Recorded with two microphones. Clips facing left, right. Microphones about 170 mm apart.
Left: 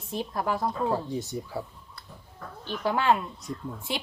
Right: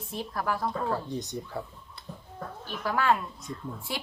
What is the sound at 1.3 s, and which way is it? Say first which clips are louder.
Speech: left 2 dB; 5° left (ahead or behind).